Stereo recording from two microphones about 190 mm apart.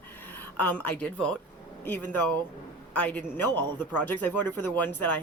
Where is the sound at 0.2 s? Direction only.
10° left (ahead or behind).